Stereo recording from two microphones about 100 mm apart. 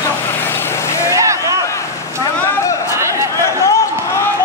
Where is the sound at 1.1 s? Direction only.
30° right (ahead or behind).